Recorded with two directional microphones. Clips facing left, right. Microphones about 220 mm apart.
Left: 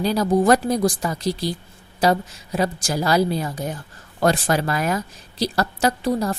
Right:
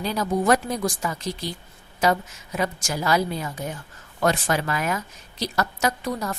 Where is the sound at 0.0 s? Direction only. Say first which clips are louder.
Left 5 dB; 35° left (ahead or behind).